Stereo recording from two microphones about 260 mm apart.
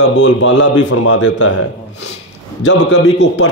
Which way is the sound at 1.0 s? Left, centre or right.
Left.